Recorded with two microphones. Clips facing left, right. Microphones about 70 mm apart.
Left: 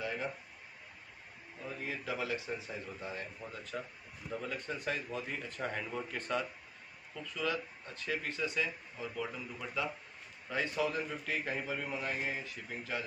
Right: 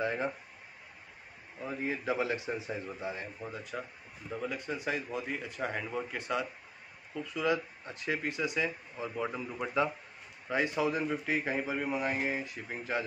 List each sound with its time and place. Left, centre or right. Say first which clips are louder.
0.0 s a man's voice: right 6 dB; right
1.6 s a man's voice: right 6 dB; right
10.5 s a man's voice: right 4 dB; centre